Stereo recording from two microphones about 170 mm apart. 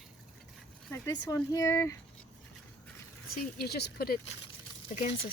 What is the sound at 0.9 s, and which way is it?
A woman's voice, 15° left (ahead or behind).